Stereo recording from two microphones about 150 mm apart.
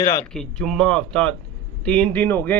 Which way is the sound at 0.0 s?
15° left (ahead or behind).